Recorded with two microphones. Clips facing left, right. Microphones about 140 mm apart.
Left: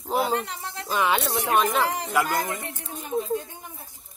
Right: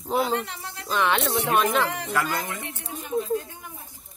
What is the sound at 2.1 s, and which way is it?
Speech, 10° left (ahead or behind).